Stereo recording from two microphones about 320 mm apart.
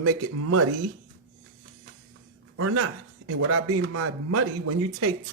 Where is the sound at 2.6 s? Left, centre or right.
Right.